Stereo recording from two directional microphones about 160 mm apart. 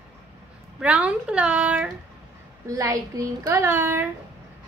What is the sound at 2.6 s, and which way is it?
A woman's voice, 20° right (ahead or behind).